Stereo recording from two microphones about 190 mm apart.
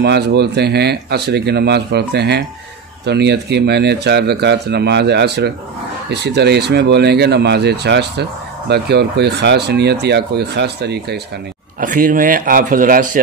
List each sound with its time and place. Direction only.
0.0 s speech: 60° right (ahead or behind)
11.8 s a man's voice: 45° right (ahead or behind)